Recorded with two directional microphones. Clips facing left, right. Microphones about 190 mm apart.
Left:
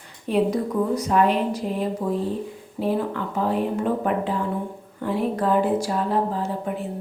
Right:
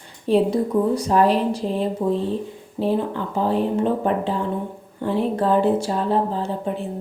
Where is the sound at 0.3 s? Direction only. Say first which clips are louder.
Right 3 dB; 30° right (ahead or behind).